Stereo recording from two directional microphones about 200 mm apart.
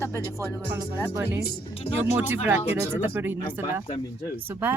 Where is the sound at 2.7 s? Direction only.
10° right (ahead or behind).